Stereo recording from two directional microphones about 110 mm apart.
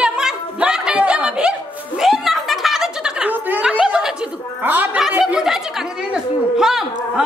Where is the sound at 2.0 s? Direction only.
5° right (ahead or behind).